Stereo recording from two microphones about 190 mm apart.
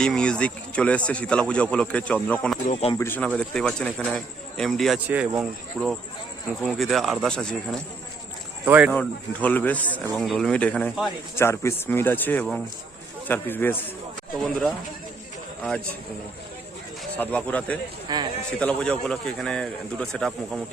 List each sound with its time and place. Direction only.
0.0 s speech: 5° left (ahead or behind)
5.0 s speech: 10° right (ahead or behind)
8.6 s speech: 10° right (ahead or behind)
8.9 s speech: 5° left (ahead or behind)
17.2 s speech: 5° left (ahead or behind)
18.1 s a man's voice: 20° right (ahead or behind)
18.6 s speech: 5° left (ahead or behind)